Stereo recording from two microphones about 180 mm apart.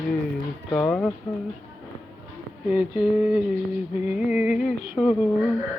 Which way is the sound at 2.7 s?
5° right (ahead or behind).